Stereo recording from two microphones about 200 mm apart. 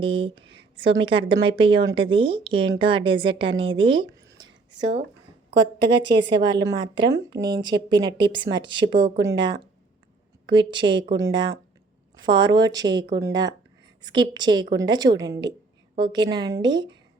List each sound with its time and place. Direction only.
0.0 s a woman's voice: 25° right (ahead or behind)
5.9 s a woman's voice: 25° right (ahead or behind)